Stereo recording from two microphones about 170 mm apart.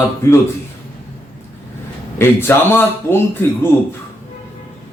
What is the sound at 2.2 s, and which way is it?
A man's voice, 15° left (ahead or behind).